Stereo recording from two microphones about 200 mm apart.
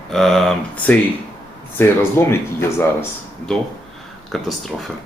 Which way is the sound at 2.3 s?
10° left (ahead or behind).